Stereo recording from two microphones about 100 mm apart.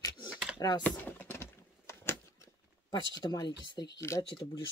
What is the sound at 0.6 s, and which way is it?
Speech, 45° left (ahead or behind).